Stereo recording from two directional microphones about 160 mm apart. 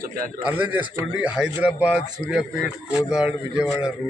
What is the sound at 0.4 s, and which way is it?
A man's voice, 10° right (ahead or behind).